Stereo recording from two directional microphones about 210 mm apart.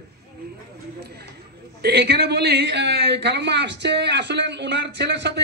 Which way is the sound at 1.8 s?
50° right (ahead or behind).